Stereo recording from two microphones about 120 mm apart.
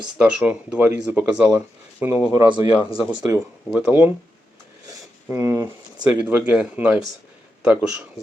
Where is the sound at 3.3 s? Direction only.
25° right (ahead or behind).